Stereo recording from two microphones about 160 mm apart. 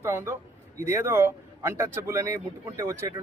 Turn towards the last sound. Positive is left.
turn(degrees=-20)  # may be behind; listen again after turning